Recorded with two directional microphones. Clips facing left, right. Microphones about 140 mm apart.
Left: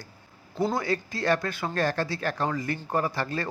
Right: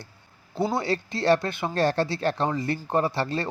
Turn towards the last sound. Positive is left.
turn(degrees=-25)  # may be behind; listen again after turning